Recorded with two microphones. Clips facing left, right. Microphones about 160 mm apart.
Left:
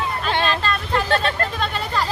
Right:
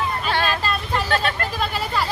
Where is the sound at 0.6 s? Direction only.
5° right (ahead or behind).